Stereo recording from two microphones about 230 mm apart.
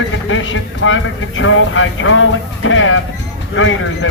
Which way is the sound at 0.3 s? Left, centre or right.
Left.